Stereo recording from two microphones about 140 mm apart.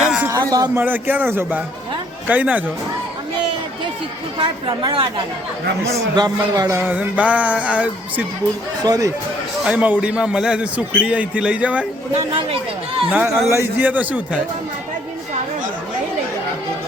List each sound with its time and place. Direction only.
0.0 s a sound: 5° right (ahead or behind)
0.3 s a sound: 30° right (ahead or behind)
0.8 s speech: 15° right (ahead or behind)
4.4 s a woman's voice: 35° right (ahead or behind); by 8.2 s 10° right (ahead or behind)
8.8 s speech: 25° right (ahead or behind)
9.6 s speech: 10° right (ahead or behind)
13.1 s speech: 15° right (ahead or behind)